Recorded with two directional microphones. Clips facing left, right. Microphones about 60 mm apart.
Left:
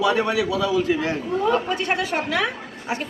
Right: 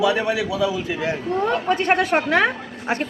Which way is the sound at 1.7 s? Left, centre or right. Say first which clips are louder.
Right 5 dB; right.